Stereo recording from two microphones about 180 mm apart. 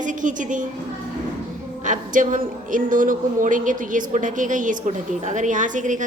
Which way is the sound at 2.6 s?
45° right (ahead or behind).